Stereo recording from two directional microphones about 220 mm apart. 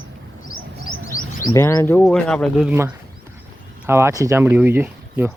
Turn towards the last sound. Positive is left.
turn(degrees=-10)  # may be behind; listen again after turning